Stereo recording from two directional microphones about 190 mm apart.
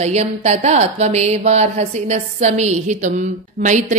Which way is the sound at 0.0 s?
35° right (ahead or behind).